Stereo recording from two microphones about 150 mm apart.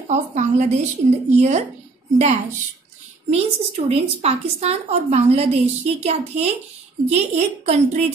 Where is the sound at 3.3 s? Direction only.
45° right (ahead or behind).